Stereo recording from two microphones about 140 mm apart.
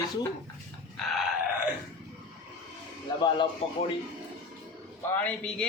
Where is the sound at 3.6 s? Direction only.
45° left (ahead or behind).